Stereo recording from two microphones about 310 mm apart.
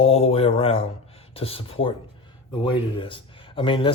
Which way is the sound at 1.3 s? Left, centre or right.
Centre.